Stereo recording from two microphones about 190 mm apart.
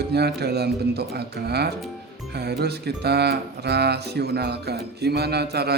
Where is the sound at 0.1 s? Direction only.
60° right (ahead or behind).